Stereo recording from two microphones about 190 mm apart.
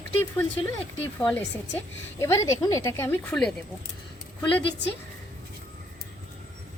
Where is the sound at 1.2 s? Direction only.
10° left (ahead or behind).